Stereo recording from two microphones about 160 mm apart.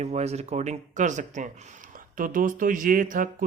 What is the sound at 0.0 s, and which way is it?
Speech, 45° right (ahead or behind).